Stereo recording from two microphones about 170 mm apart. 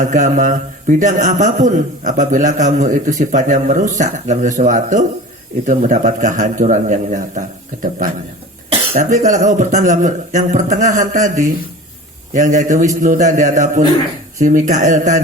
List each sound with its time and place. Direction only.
0.0 s a man's voice: 50° right (ahead or behind)